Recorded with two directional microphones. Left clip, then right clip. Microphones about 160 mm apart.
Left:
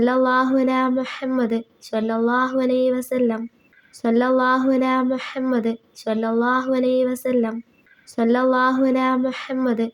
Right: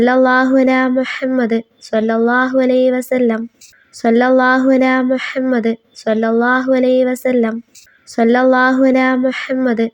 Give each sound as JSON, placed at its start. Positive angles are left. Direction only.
{"t": 0.0, "sound": "speech", "side_deg": -25}